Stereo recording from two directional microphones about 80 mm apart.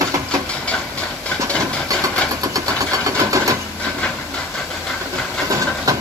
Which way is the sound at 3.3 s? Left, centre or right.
Right.